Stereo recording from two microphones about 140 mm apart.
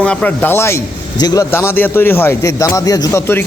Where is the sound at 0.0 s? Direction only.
10° left (ahead or behind).